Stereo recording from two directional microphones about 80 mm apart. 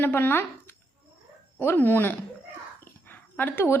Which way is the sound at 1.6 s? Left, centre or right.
Left.